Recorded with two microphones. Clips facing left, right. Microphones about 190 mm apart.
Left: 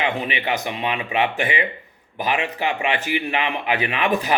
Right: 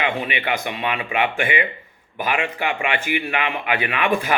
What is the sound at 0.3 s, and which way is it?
Speech, 40° left (ahead or behind).